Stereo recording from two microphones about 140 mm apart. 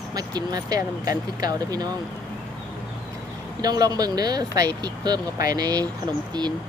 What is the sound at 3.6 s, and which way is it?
Speech, 30° right (ahead or behind).